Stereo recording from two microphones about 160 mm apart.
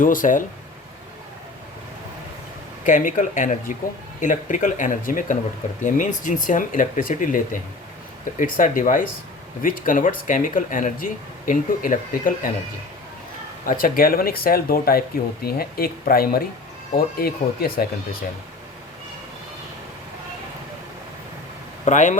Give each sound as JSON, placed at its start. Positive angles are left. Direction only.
{"t": 0.0, "sound": "speech", "side_deg": 55}
{"t": 2.8, "sound": "speech", "side_deg": 55}
{"t": 13.7, "sound": "speech", "side_deg": 65}
{"t": 21.8, "sound": "speech", "side_deg": 50}